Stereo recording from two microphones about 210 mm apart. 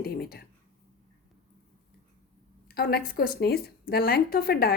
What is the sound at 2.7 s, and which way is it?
A woman's voice, 50° left (ahead or behind).